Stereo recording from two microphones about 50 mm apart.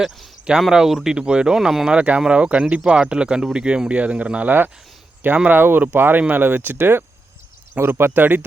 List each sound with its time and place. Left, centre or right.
0.6 s speech: centre
1.2 s speech: centre
1.5 s speech: centre
1.9 s speech: right
5.5 s speech: right